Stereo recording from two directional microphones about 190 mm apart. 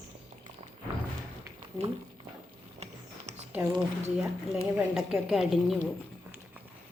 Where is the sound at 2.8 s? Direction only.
35° right (ahead or behind).